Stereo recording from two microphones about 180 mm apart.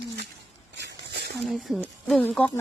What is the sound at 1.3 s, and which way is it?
Speech, centre (ahead or behind).